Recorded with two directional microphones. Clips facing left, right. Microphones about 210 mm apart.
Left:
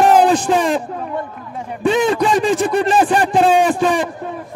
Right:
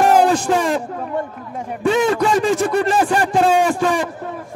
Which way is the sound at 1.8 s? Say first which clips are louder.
Left 1 dB; 20° left (ahead or behind).